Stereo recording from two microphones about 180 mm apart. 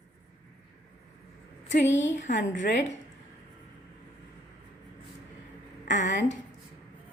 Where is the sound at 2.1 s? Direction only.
45° left (ahead or behind).